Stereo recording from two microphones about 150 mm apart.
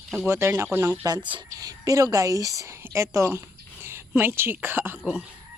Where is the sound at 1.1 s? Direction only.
30° right (ahead or behind); by 5.0 s 15° right (ahead or behind).